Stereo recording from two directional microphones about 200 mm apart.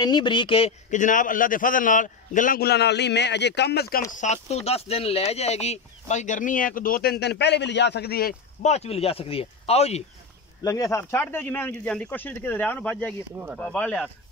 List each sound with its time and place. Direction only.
0.0 s a man's voice: 25° left (ahead or behind); by 4.0 s 55° left (ahead or behind)
4.1 s speech: 35° left (ahead or behind)
8.6 s speech: 30° left (ahead or behind)
10.6 s speech: 15° left (ahead or behind)
13.4 s speech: 10° right (ahead or behind)
13.7 s speech: 5° left (ahead or behind)